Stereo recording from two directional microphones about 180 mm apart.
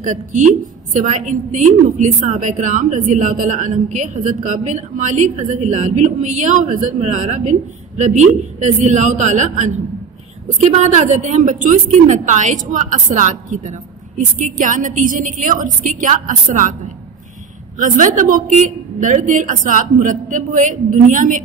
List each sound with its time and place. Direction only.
0.0 s a woman's voice: 45° right (ahead or behind)
17.7 s a woman's voice: 45° right (ahead or behind)